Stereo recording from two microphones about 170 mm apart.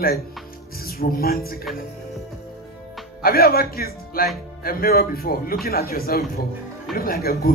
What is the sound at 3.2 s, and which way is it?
Speech, 60° left (ahead or behind).